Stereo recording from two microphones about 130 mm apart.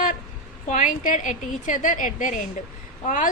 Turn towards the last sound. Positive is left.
turn(degrees=90)